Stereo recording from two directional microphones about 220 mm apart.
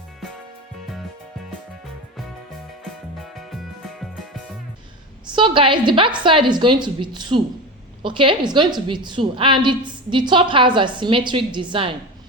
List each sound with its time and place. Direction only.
3.2 s music: centre (ahead or behind)
5.3 s a woman's voice: 20° right (ahead or behind)